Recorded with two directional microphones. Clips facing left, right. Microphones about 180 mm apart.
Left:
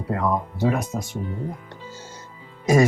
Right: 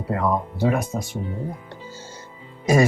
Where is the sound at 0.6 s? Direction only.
30° right (ahead or behind).